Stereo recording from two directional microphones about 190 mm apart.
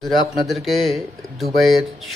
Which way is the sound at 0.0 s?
Centre (ahead or behind).